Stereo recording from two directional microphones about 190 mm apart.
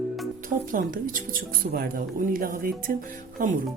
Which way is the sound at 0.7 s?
45° right (ahead or behind).